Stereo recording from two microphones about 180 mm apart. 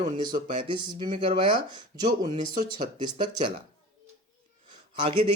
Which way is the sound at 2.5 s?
45° right (ahead or behind).